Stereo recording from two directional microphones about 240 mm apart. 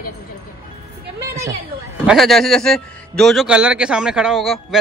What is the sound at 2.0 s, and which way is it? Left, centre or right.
A man's voice, centre.